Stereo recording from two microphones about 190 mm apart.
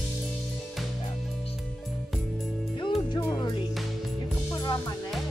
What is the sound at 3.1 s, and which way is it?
Music, 20° left (ahead or behind).